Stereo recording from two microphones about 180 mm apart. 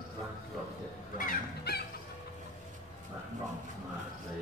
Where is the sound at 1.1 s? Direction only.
55° left (ahead or behind).